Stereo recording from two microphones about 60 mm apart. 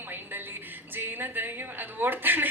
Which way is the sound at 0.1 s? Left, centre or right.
Right.